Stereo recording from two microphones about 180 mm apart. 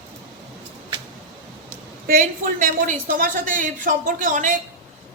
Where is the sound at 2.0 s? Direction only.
50° right (ahead or behind).